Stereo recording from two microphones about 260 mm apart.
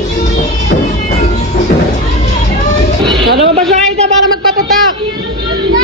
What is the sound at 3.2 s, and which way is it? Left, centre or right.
Speech, right.